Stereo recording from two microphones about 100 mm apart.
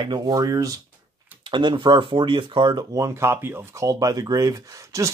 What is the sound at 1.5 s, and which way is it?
Speech, 50° right (ahead or behind).